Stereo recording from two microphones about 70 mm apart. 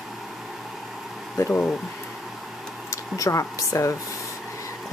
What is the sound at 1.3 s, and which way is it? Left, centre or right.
Speech, left.